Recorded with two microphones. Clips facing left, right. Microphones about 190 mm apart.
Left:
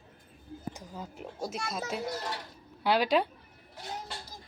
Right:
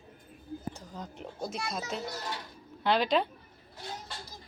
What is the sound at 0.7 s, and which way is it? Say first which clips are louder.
Speech: even; 10° left (ahead or behind).